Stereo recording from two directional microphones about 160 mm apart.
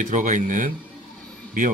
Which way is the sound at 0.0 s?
50° right (ahead or behind).